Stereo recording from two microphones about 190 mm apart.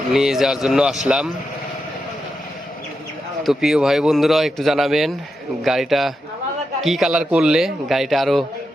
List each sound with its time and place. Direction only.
0.1 s speech: centre (ahead or behind)
3.4 s speech: centre (ahead or behind)